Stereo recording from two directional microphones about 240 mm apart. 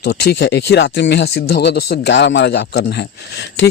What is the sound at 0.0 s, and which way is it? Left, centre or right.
Speech, left.